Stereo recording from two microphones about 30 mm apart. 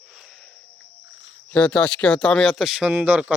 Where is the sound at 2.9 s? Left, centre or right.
Right.